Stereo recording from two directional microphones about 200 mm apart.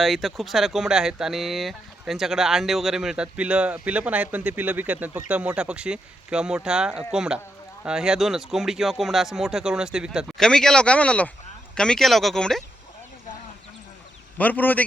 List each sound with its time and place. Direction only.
0.0 s speech: centre (ahead or behind)
14.3 s a man's voice: 10° left (ahead or behind)